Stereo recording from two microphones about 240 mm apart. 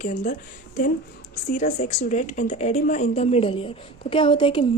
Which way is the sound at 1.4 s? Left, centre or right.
Left.